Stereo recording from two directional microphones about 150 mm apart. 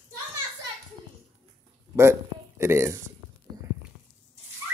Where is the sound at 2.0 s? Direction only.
15° right (ahead or behind).